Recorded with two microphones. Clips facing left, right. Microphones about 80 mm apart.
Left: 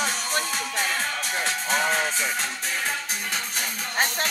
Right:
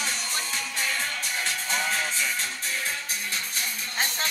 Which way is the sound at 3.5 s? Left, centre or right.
Left.